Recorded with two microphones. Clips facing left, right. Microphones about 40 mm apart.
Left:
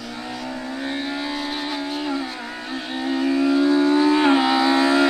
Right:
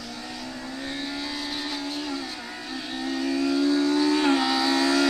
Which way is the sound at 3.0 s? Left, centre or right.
Left.